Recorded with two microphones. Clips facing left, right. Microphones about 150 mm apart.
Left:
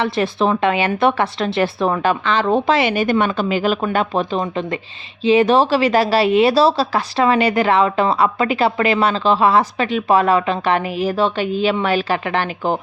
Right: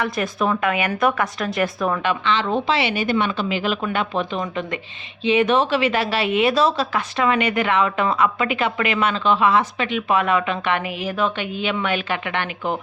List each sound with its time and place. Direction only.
0.0 s speech: 30° left (ahead or behind)